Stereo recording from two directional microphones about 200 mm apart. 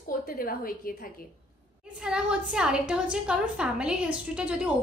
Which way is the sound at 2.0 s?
5° right (ahead or behind).